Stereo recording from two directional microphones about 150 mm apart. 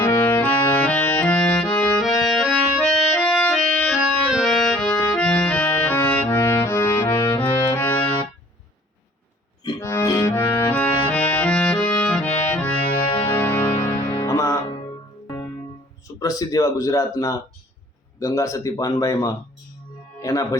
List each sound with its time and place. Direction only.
0.0 s music: 15° left (ahead or behind)
2.0 s accordion: 5° left (ahead or behind)
4.3 s music: centre (ahead or behind)
4.9 s music: 15° left (ahead or behind)
9.8 s accordion: 15° left (ahead or behind)
13.2 s music: 15° left (ahead or behind)
16.2 s speech: 25° left (ahead or behind)